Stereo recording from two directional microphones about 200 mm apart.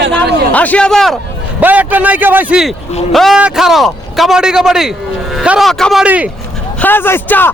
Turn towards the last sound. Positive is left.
turn(degrees=10)  # may be behind; listen again after turning